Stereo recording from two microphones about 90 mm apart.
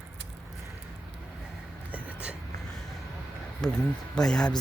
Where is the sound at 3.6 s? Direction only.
5° left (ahead or behind).